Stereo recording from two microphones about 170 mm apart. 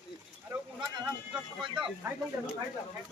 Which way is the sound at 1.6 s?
30° right (ahead or behind).